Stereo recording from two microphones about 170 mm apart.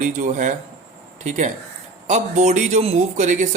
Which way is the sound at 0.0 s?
45° right (ahead or behind).